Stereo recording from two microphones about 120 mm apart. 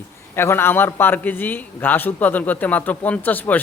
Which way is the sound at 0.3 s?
20° left (ahead or behind).